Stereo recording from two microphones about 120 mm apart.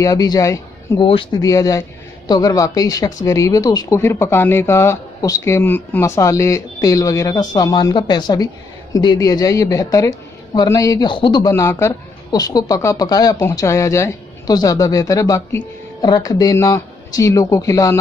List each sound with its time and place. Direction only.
0.0 s speech: 30° left (ahead or behind)
0.9 s speech: 45° left (ahead or behind)
1.4 s speech: 30° left (ahead or behind)
4.0 s a woman's voice: 20° left (ahead or behind); by 11.5 s 40° left (ahead or behind)
11.5 s a woman's voice: 25° left (ahead or behind)